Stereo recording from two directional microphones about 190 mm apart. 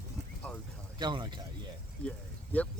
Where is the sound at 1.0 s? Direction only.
25° right (ahead or behind).